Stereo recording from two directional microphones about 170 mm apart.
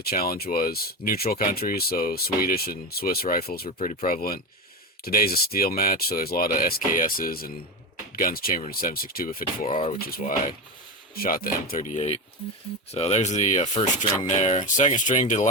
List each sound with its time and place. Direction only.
0.0 s speech: 60° left (ahead or behind)
3.7 s speech: 50° left (ahead or behind)